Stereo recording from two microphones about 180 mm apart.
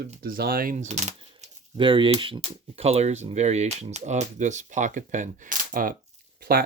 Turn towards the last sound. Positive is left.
turn(degrees=-60)  # may be behind; listen again after turning